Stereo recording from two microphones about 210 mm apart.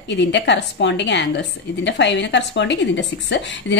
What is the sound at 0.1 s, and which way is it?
A woman's voice, 55° left (ahead or behind).